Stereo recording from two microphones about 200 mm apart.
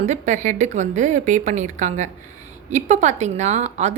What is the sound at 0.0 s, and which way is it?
A woman's voice, 35° right (ahead or behind).